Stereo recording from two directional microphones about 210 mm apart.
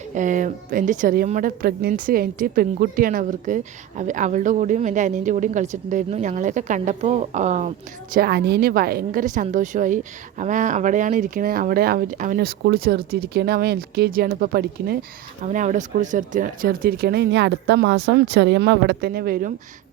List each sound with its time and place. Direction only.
0.1 s a woman's voice: 35° right (ahead or behind)
8.1 s a woman's voice: 50° right (ahead or behind)
15.4 s a woman's voice: 35° right (ahead or behind)